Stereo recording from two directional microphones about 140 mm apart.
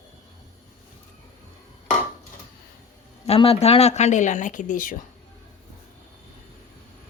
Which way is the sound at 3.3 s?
45° left (ahead or behind).